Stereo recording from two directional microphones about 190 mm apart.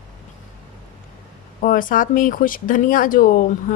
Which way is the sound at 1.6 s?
45° left (ahead or behind).